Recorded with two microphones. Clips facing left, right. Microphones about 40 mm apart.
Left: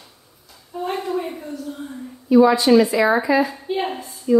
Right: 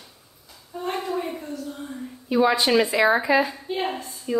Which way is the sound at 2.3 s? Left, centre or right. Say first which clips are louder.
Left 6 dB; right.